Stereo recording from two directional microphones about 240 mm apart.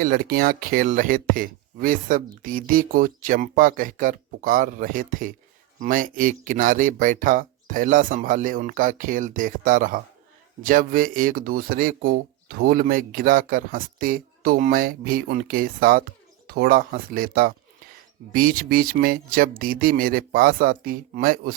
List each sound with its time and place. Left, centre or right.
0.0 s speech: right